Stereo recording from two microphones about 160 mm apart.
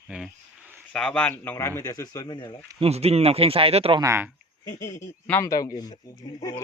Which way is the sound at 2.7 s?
40° right (ahead or behind).